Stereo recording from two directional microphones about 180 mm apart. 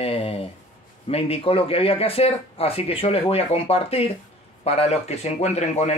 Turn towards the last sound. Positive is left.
turn(degrees=40)  # may be behind; listen again after turning